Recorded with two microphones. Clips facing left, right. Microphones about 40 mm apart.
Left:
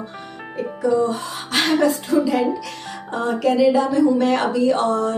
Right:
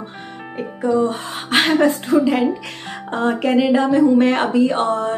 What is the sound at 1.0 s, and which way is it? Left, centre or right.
A woman's voice, right.